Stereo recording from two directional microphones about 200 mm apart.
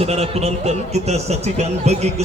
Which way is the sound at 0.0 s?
30° right (ahead or behind).